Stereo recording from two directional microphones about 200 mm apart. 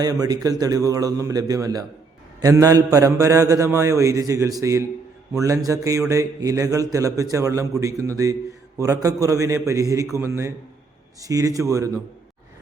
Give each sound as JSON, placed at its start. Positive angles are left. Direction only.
{"t": 0.0, "sound": "a man's voice", "side_deg": -20}